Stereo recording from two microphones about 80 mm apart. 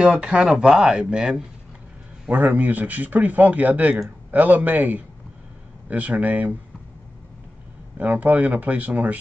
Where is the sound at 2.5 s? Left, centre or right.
Right.